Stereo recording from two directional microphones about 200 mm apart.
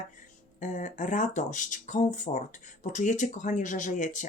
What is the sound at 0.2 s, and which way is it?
Speech, 40° left (ahead or behind).